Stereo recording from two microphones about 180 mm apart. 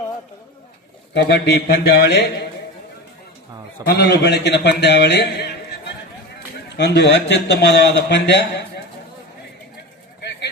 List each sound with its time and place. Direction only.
1.1 s a man's voice: 70° left (ahead or behind)
3.8 s a man's voice: 65° left (ahead or behind)